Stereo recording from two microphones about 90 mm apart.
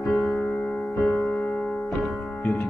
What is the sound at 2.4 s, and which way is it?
Music, 20° left (ahead or behind).